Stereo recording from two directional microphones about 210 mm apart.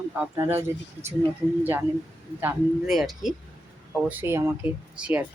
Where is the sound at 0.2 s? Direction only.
10° right (ahead or behind).